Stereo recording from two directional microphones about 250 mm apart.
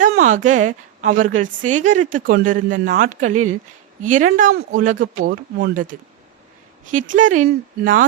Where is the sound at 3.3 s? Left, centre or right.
Right.